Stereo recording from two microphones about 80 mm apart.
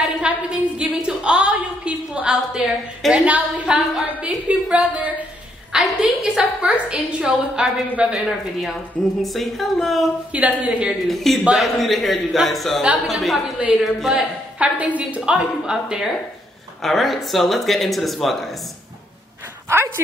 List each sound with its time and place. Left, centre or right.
0.0 s a woman's voice: centre
10.3 s a woman's voice: centre
11.1 s a woman's voice: centre
16.8 s speech: centre
19.7 s speech: right